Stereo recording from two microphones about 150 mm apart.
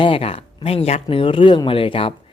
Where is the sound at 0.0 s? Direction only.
40° left (ahead or behind).